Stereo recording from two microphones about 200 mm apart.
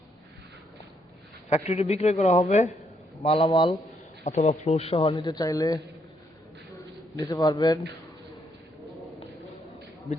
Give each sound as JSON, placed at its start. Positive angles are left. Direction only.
{"t": 1.5, "sound": "speech", "side_deg": 35}
{"t": 5.1, "sound": "speech", "side_deg": 20}
{"t": 7.2, "sound": "speech", "side_deg": 20}
{"t": 10.1, "sound": "speech", "side_deg": 0}